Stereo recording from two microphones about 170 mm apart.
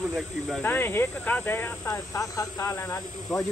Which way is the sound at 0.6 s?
10° left (ahead or behind).